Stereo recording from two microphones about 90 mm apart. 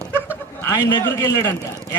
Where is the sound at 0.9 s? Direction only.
45° left (ahead or behind).